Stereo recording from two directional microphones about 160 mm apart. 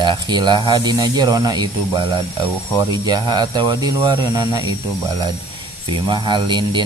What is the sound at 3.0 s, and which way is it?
Speech, 25° right (ahead or behind).